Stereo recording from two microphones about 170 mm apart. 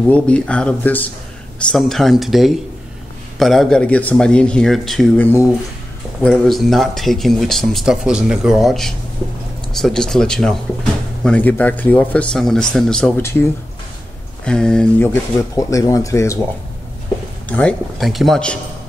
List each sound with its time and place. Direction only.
0.0 s speech: 5° left (ahead or behind)
14.4 s speech: 5° left (ahead or behind)
15.5 s speech: 20° left (ahead or behind)
17.5 s speech: 5° left (ahead or behind)